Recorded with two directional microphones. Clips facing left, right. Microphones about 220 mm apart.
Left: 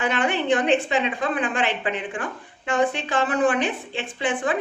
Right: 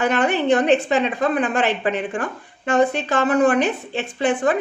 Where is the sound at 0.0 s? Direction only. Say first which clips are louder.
Right 5 dB; 40° right (ahead or behind).